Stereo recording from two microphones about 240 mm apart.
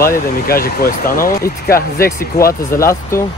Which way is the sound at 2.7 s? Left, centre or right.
Centre.